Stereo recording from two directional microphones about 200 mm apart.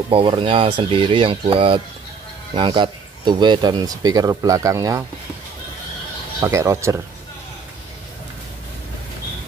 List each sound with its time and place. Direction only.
0.1 s speech: 25° right (ahead or behind)
6.4 s speech: 15° right (ahead or behind)